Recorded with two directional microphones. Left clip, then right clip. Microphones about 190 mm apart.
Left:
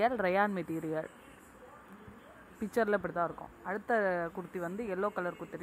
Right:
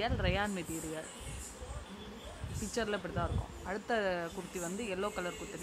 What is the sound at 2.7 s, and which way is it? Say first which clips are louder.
Speech: left 6 dB; 25° left (ahead or behind).